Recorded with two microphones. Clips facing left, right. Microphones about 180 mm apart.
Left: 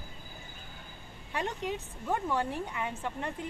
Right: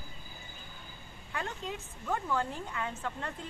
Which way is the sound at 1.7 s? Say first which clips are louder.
Left 3 dB; 25° left (ahead or behind).